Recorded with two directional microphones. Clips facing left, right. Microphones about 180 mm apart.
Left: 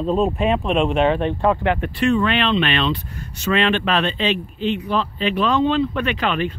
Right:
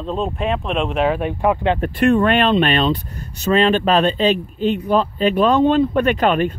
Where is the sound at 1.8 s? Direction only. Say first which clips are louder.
Right 6 dB; 50° right (ahead or behind).